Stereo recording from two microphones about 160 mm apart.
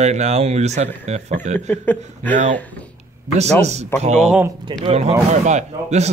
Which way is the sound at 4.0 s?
45° right (ahead or behind).